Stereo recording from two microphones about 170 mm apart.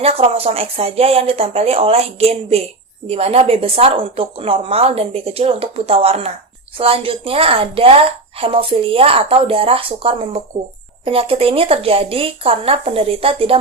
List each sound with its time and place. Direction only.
0.0 s a woman's voice: 35° right (ahead or behind)